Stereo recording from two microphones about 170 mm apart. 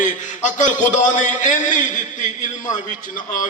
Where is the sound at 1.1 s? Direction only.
50° left (ahead or behind).